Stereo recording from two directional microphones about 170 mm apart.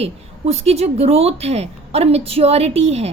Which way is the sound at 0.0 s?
40° right (ahead or behind).